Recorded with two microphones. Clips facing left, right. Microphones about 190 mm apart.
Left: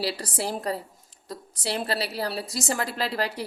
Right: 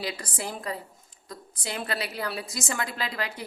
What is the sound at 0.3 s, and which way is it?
A woman's voice, 35° left (ahead or behind).